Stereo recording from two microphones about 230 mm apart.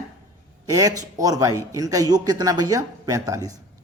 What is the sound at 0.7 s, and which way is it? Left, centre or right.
A man's voice, centre.